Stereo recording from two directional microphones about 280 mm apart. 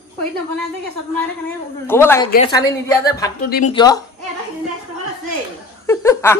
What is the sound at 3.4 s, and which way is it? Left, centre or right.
Speech, left.